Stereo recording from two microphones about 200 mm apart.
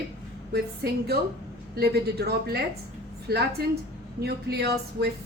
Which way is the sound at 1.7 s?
55° right (ahead or behind).